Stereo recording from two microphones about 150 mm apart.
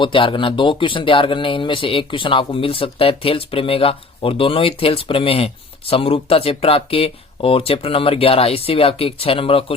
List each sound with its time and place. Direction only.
0.0 s speech: 35° left (ahead or behind)